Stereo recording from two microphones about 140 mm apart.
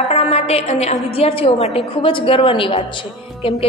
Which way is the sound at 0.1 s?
50° left (ahead or behind).